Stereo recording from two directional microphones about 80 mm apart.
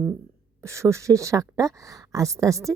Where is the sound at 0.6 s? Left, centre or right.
Right.